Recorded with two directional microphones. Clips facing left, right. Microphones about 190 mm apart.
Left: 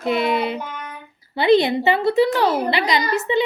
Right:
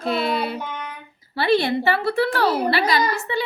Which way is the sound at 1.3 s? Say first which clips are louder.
Left 4 dB; 20° left (ahead or behind).